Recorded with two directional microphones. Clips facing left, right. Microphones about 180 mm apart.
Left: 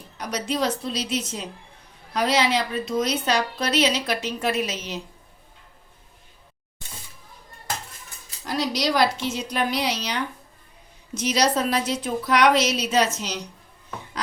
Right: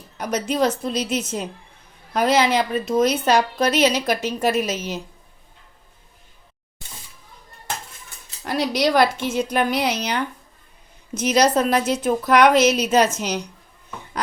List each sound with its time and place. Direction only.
0.2 s a woman's voice: 50° right (ahead or behind)
8.4 s a woman's voice: 55° right (ahead or behind)